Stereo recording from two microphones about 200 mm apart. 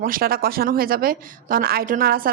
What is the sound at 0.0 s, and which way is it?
Speech, 45° right (ahead or behind).